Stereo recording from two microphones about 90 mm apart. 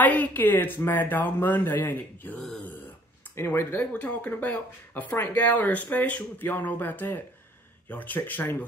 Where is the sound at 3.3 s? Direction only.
25° left (ahead or behind).